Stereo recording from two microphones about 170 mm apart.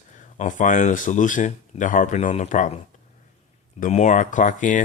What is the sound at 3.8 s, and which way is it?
Speech, 45° left (ahead or behind).